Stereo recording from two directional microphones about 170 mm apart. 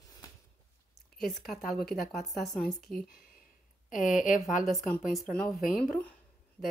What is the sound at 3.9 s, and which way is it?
Speech, 50° left (ahead or behind).